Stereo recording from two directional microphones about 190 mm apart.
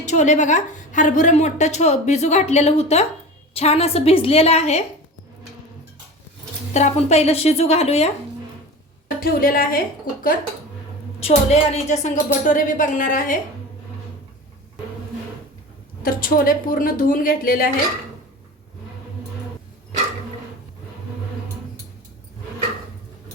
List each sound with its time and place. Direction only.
0.0 s a woman's voice: 40° left (ahead or behind)
6.7 s a woman's voice: 35° left (ahead or behind)
9.0 s a woman's voice: 50° left (ahead or behind)
11.2 s a woman's voice: 35° left (ahead or behind)
16.0 s a woman's voice: 50° left (ahead or behind)